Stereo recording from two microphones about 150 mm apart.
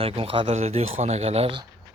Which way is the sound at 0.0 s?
40° right (ahead or behind).